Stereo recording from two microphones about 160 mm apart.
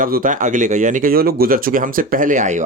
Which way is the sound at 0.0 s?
60° right (ahead or behind).